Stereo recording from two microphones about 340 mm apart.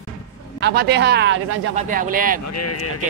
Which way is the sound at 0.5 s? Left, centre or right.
Right.